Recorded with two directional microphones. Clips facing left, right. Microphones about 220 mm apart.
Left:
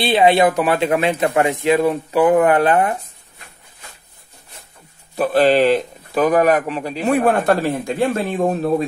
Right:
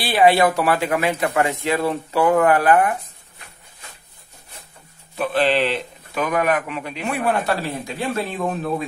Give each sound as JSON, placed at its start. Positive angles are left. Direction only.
{"t": 0.0, "sound": "speech", "side_deg": 20}
{"t": 5.1, "sound": "speech", "side_deg": 40}